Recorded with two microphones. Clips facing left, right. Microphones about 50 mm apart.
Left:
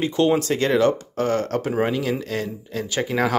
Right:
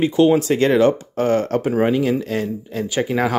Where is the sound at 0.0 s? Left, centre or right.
Centre.